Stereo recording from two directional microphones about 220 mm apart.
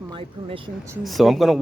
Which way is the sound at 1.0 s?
Centre (ahead or behind).